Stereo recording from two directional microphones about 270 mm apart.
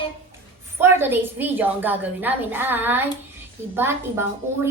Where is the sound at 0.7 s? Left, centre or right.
Centre.